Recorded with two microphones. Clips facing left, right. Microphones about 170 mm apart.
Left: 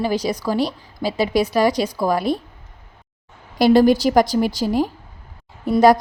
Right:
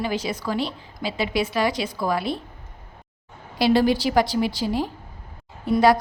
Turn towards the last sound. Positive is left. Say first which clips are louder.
# left 4 dB
turn(degrees=40)  # may be behind; listen again after turning